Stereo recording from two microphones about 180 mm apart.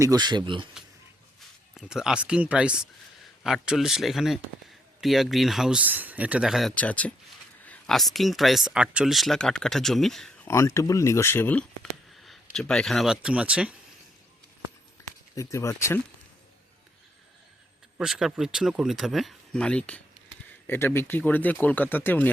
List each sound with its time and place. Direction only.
0.0 s speech: 20° right (ahead or behind)
1.7 s speech: 5° right (ahead or behind)
10.5 s speech: 15° left (ahead or behind); by 13.7 s 5° right (ahead or behind)
15.4 s speech: 15° left (ahead or behind)
17.9 s speech: 5° right (ahead or behind)